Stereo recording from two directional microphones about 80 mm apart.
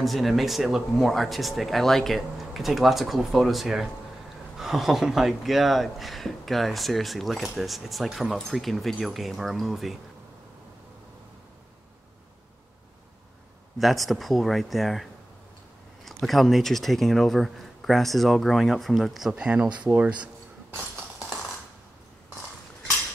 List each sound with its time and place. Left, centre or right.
0.0 s speech: centre
13.7 s speech: centre
16.1 s speech: centre